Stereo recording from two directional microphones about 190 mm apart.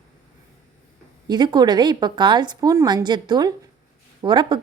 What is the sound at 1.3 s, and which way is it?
A woman's voice, 20° right (ahead or behind).